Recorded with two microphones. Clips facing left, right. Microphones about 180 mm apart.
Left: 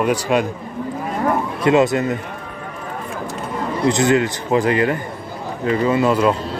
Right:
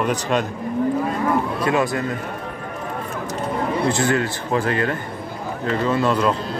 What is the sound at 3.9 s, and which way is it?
Speech, 20° left (ahead or behind).